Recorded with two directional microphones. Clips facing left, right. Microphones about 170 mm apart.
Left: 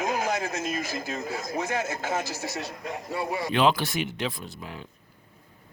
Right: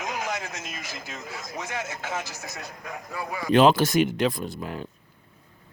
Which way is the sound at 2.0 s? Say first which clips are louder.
Left 4 dB; 35° left (ahead or behind).